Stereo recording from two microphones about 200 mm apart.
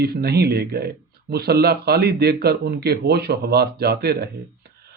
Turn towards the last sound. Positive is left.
turn(degrees=-50)  # may be behind; listen again after turning